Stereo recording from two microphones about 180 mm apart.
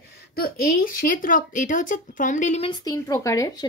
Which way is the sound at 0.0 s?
55° left (ahead or behind).